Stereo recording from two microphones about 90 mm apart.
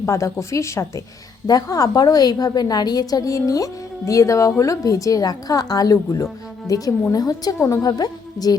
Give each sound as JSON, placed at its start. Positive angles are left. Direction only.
{"t": 0.0, "sound": "a woman's voice", "side_deg": 35}